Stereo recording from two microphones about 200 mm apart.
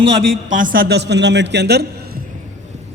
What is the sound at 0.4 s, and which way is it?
A man's voice, 40° right (ahead or behind).